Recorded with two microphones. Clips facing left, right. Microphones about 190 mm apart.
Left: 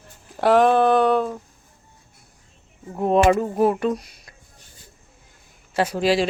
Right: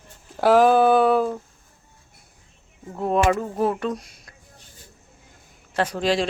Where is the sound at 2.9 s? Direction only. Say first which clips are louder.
Left 4 dB; 20° left (ahead or behind).